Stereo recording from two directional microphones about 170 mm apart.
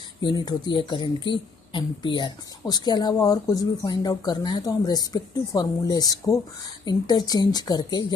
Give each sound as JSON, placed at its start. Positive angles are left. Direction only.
{"t": 0.2, "sound": "speech", "side_deg": 25}